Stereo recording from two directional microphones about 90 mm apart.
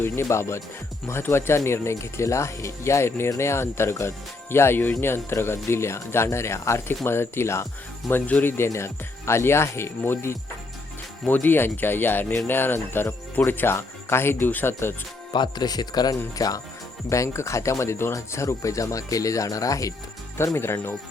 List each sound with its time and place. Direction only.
0.0 s speech: 30° left (ahead or behind)
8.3 s speech: 20° left (ahead or behind)
15.3 s speech: 55° left (ahead or behind)
17.1 s speech: 35° left (ahead or behind)